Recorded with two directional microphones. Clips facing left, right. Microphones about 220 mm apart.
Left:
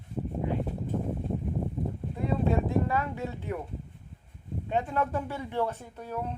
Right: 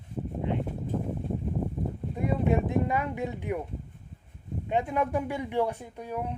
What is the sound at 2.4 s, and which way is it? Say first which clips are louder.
Speech: right 1 dB; 20° right (ahead or behind).